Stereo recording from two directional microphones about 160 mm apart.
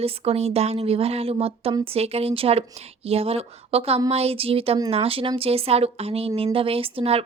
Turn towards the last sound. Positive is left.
turn(degrees=-35)  # may be behind; listen again after turning